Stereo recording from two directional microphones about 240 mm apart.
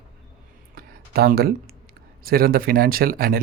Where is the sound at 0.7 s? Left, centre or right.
Right.